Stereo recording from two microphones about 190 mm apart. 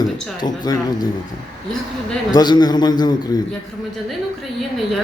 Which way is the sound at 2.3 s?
20° left (ahead or behind).